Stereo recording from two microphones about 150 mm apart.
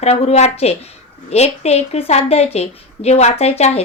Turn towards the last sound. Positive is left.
turn(degrees=45)  # may be behind; listen again after turning